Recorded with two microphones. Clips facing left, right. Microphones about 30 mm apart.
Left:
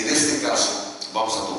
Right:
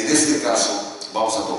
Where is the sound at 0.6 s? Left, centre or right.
Centre.